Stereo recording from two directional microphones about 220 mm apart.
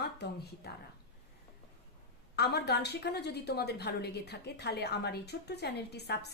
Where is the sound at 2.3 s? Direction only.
50° left (ahead or behind).